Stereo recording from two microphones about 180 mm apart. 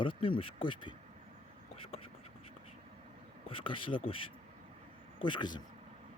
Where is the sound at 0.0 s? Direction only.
30° left (ahead or behind).